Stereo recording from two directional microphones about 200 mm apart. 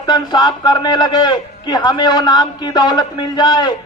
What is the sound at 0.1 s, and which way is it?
Speech, 20° left (ahead or behind).